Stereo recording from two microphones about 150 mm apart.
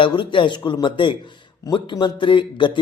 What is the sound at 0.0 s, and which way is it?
Speech, 35° left (ahead or behind).